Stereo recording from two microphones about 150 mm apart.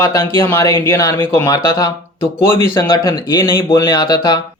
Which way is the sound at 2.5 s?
15° left (ahead or behind).